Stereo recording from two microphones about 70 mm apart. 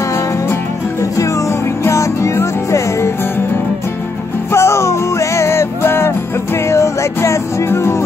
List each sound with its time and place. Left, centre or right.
1.9 s music: left
4.5 s music: left